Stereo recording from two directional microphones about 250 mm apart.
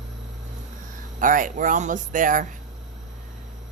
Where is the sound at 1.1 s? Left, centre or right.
Right.